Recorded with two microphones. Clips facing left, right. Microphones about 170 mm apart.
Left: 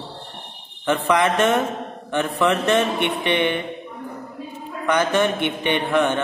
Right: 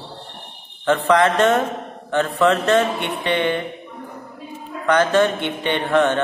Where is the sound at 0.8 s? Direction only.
15° left (ahead or behind).